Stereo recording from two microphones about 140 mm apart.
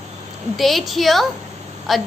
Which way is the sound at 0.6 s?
Centre (ahead or behind).